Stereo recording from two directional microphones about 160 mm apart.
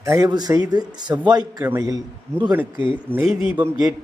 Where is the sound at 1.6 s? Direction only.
10° right (ahead or behind).